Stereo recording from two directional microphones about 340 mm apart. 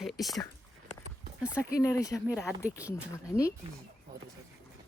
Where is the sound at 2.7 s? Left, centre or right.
Centre.